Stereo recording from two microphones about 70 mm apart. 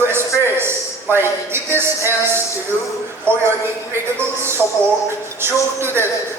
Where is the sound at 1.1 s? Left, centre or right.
Right.